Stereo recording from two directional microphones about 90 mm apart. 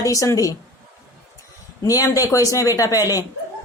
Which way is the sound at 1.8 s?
40° left (ahead or behind).